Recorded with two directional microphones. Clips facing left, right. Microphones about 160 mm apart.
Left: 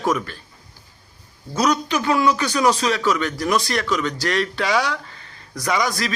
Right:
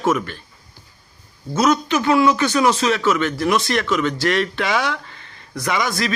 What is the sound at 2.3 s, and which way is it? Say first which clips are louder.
Speech: right 2 dB; 35° left (ahead or behind).